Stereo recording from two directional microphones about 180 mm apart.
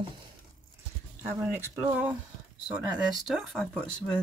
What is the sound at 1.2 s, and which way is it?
Speech, 15° right (ahead or behind).